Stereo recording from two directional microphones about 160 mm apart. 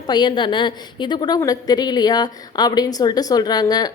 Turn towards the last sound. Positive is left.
turn(degrees=25)  # may be behind; listen again after turning